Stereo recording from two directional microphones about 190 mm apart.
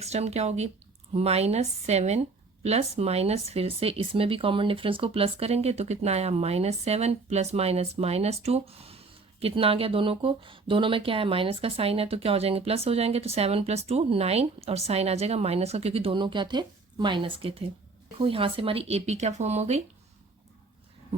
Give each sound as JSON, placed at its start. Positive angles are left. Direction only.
{"t": 0.0, "sound": "speech", "side_deg": -35}